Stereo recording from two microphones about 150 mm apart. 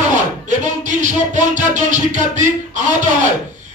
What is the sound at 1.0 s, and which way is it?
Music, 55° right (ahead or behind).